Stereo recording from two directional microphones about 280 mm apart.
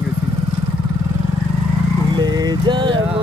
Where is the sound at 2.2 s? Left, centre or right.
Centre.